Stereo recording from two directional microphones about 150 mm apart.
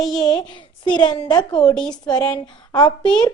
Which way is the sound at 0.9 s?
30° left (ahead or behind).